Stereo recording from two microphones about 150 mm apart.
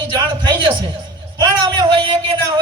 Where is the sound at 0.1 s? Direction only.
30° right (ahead or behind).